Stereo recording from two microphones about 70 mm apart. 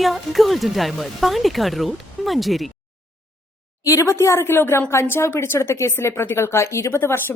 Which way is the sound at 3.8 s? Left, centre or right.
Left.